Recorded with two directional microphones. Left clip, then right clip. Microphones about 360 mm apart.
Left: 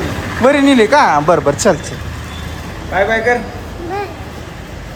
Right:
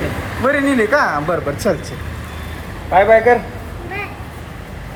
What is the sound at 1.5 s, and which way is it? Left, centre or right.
Speech, left.